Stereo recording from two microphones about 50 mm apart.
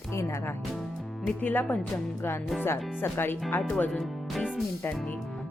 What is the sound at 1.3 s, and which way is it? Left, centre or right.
Speech, left.